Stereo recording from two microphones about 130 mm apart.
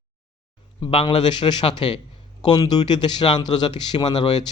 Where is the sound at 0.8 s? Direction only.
40° left (ahead or behind).